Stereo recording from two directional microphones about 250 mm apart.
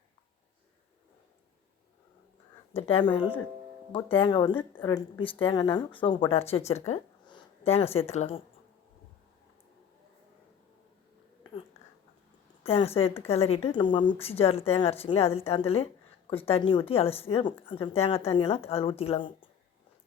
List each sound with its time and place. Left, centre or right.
2.7 s speech: left
12.6 s speech: left